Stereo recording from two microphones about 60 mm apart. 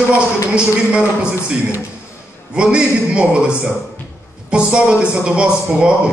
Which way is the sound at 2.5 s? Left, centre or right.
Centre.